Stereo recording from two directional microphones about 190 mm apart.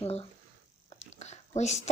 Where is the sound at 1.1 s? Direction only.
35° left (ahead or behind).